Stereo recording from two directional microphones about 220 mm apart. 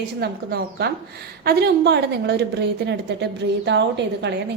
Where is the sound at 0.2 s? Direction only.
50° right (ahead or behind).